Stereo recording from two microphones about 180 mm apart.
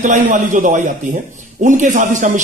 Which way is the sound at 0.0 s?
45° right (ahead or behind).